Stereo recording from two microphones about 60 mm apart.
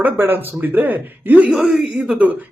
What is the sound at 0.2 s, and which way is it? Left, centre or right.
Speech, right.